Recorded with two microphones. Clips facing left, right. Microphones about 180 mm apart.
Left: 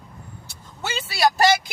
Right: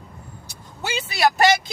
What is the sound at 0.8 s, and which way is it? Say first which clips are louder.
Speech: right 2 dB; 15° right (ahead or behind).